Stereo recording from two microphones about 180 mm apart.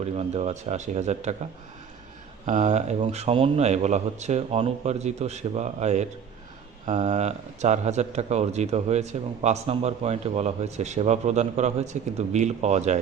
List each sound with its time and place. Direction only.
0.0 s speech: 35° right (ahead or behind)
2.5 s speech: 40° right (ahead or behind)